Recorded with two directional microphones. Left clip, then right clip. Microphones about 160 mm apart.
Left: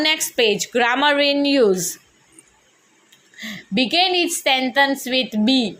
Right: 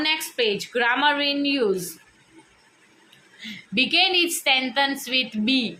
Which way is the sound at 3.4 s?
35° left (ahead or behind).